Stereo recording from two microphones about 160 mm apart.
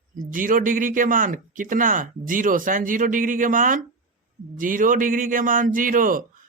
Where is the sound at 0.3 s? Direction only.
55° right (ahead or behind).